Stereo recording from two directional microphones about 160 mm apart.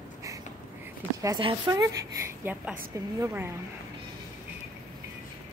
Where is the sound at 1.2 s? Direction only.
25° right (ahead or behind).